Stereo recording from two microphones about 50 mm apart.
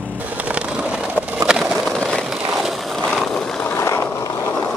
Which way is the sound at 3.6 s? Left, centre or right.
Left.